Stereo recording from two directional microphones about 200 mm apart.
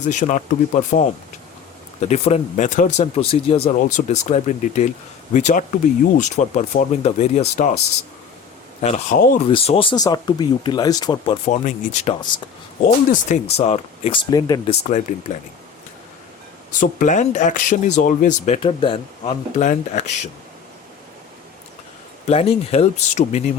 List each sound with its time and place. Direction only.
0.1 s speech: 35° left (ahead or behind)
8.8 s speech: 35° left (ahead or behind)
11.4 s speech: 35° left (ahead or behind); by 14.6 s 20° left (ahead or behind)
14.7 s speech: 35° left (ahead or behind)
16.7 s speech: 40° left (ahead or behind)
22.3 s speech: 30° left (ahead or behind)